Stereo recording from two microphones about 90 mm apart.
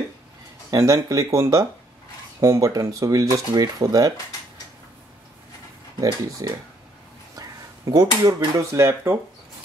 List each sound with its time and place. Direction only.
0.7 s speech: 40° right (ahead or behind)
5.9 s speech: 40° right (ahead or behind)
7.3 s a sound: 45° right (ahead or behind)
8.5 s speech: 30° right (ahead or behind)